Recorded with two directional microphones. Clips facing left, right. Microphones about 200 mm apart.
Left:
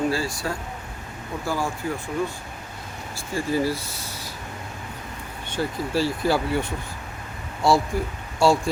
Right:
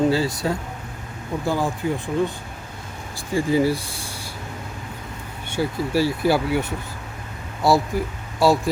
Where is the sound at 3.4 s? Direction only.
15° right (ahead or behind).